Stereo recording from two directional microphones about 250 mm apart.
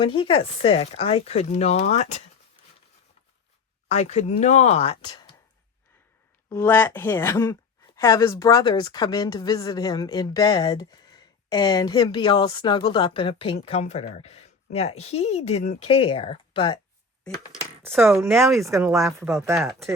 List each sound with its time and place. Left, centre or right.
0.0 s speech: left
3.8 s speech: left
6.5 s a woman's voice: centre
17.8 s speech: centre